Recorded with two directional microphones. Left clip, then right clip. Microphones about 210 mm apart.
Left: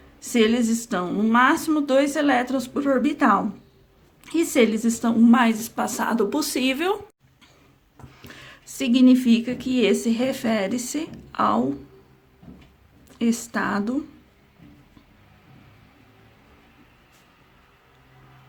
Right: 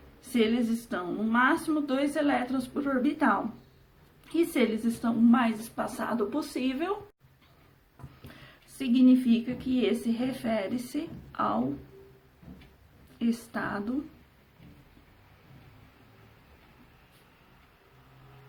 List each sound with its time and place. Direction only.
0.2 s speech: 45° left (ahead or behind)
8.2 s speech: 45° left (ahead or behind)
13.1 s speech: 45° left (ahead or behind)